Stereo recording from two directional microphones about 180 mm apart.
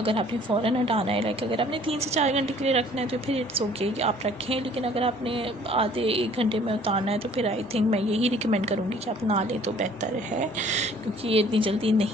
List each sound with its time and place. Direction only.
0.0 s a woman's voice: 30° right (ahead or behind)